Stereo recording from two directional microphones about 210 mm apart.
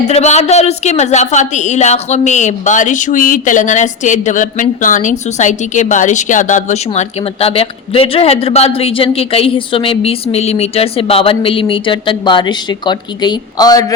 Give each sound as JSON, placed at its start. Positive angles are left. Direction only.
{"t": 0.1, "sound": "a woman's voice", "side_deg": 30}